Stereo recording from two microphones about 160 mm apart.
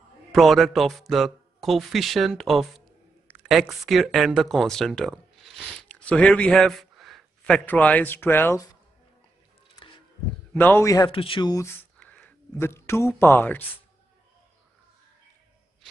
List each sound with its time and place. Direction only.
0.3 s a man's voice: centre (ahead or behind)
10.5 s a man's voice: 10° left (ahead or behind)
11.1 s speech: 35° left (ahead or behind)
11.5 s speech: 15° left (ahead or behind)